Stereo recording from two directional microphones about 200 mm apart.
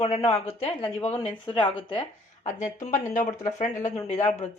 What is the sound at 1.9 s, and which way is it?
Speech, 25° left (ahead or behind).